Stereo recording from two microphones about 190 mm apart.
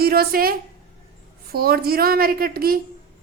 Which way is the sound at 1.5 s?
55° right (ahead or behind).